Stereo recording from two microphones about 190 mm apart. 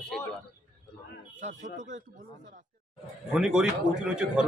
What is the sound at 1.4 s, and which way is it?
Speech, 40° right (ahead or behind).